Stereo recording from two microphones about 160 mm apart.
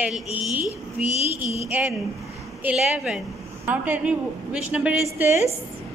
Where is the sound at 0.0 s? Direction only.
10° right (ahead or behind).